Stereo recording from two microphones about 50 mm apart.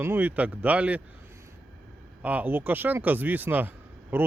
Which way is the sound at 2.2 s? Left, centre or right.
Right.